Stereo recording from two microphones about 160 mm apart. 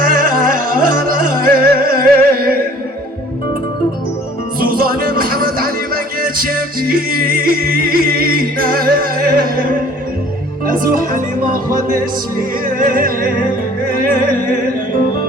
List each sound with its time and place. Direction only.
0.0 s music: 60° right (ahead or behind)
4.6 s music: 65° right (ahead or behind)